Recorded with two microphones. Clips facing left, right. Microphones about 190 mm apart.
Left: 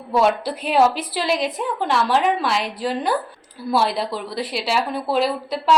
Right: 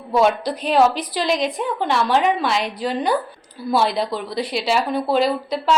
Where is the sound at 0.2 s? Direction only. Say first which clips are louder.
Right 1 dB; 5° left (ahead or behind).